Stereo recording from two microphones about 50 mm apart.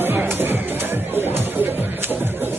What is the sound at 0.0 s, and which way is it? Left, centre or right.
Music, right.